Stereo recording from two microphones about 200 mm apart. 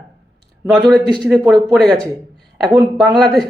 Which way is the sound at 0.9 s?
Centre (ahead or behind).